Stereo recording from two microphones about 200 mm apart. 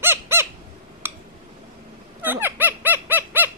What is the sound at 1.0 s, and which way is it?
Tick-tock, 10° right (ahead or behind).